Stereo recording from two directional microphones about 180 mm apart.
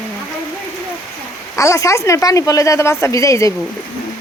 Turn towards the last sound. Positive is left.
turn(degrees=15)  # may be behind; listen again after turning